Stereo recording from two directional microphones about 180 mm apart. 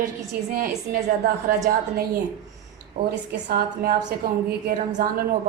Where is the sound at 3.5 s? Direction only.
55° right (ahead or behind).